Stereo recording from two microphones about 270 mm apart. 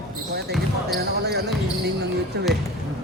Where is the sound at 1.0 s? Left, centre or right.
Right.